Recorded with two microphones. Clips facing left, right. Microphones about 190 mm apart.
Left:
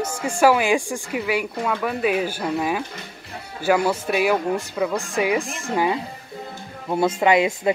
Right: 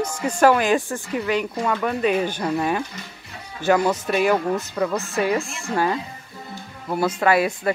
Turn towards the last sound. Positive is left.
turn(degrees=20)  # may be behind; listen again after turning